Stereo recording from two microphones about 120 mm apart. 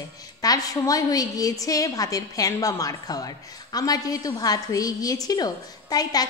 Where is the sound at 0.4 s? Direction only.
30° left (ahead or behind).